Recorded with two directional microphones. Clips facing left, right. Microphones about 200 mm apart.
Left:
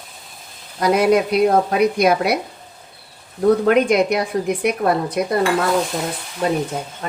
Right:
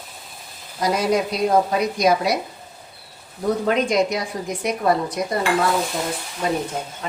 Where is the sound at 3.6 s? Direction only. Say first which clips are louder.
Left 4 dB; 60° left (ahead or behind).